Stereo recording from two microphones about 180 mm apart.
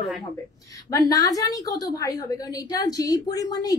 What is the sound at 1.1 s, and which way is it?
A woman's voice, 20° left (ahead or behind).